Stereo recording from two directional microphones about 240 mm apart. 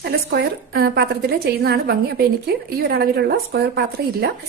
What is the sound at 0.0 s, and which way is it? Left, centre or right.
Speech, right.